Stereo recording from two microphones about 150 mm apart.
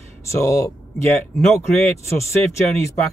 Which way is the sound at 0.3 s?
20° left (ahead or behind).